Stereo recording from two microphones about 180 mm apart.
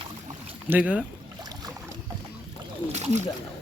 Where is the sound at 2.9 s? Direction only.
40° right (ahead or behind).